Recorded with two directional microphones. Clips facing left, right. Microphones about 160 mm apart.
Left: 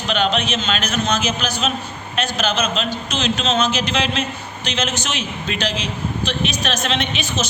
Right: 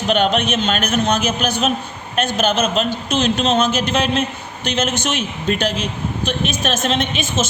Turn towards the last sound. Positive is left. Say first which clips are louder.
# right 3 dB
turn(degrees=-50)  # may be behind; listen again after turning